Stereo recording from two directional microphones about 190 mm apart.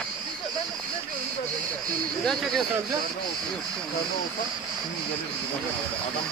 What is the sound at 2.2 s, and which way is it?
Speech, centre (ahead or behind).